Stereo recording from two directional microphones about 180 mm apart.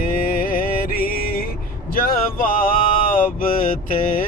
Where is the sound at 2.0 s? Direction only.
50° left (ahead or behind).